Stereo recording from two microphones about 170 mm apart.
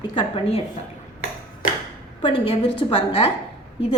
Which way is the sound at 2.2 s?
30° left (ahead or behind).